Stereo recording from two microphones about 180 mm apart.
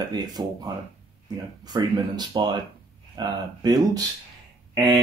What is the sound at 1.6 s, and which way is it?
Speech, 20° right (ahead or behind).